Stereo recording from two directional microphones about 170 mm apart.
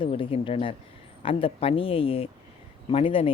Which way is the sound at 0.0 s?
30° left (ahead or behind).